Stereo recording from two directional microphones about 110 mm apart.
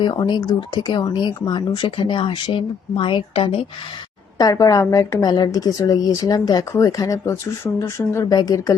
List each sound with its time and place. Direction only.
0.0 s speech: 40° left (ahead or behind)
4.4 s a woman's voice: 35° left (ahead or behind)